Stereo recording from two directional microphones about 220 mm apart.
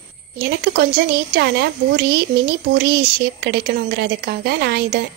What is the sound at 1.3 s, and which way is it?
Speech, 45° right (ahead or behind).